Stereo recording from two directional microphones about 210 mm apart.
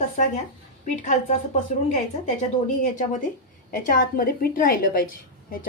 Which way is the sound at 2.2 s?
35° left (ahead or behind).